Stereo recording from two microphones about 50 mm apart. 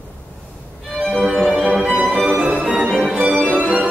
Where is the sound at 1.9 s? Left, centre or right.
Right.